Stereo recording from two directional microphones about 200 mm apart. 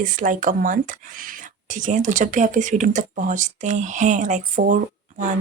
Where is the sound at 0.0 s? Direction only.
40° right (ahead or behind).